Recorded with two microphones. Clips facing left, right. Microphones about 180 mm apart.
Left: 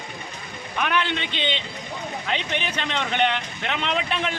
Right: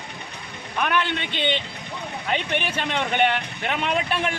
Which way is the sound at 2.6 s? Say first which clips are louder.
Right 2 dB; 5° right (ahead or behind).